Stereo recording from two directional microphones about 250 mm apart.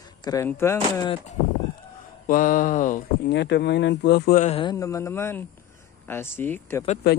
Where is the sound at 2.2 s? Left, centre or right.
Left; by 6.8 s centre.